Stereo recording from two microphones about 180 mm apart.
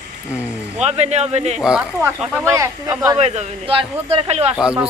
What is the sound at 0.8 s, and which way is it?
Speech, 40° right (ahead or behind).